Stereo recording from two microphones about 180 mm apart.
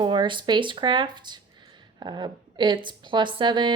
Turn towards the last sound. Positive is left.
turn(degrees=-25)  # may be behind; listen again after turning